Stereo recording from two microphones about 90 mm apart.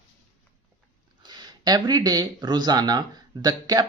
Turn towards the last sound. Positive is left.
turn(degrees=-45)  # may be behind; listen again after turning